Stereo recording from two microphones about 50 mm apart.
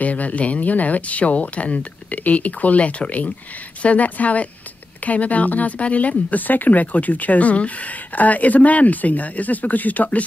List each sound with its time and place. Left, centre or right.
0.0 s speech: left